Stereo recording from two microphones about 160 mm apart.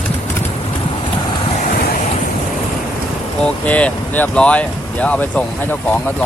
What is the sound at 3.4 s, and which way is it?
Vehicle, 10° left (ahead or behind).